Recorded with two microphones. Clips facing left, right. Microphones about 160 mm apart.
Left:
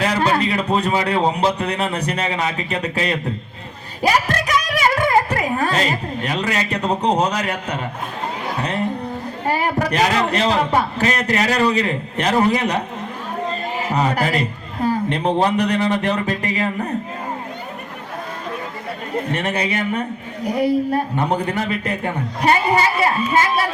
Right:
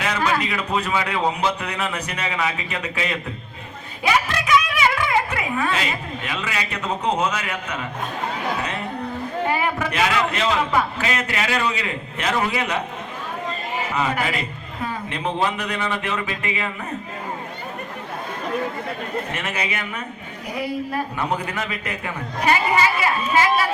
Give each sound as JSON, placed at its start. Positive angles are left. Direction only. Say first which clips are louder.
{"t": 0.0, "sound": "a woman's voice", "louder": "left 4 dB", "side_deg": 35}
{"t": 9.5, "sound": "speech", "louder": "left 6 dB", "side_deg": 35}
{"t": 13.9, "sound": "speech", "louder": "left 5 dB", "side_deg": 35}
{"t": 19.3, "sound": "speech", "louder": "left 6 dB", "side_deg": 35}